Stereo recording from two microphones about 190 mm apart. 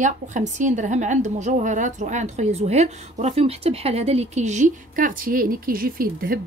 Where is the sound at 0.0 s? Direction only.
40° right (ahead or behind).